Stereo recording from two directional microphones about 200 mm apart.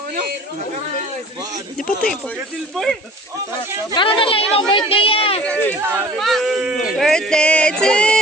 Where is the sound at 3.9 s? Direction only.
25° left (ahead or behind).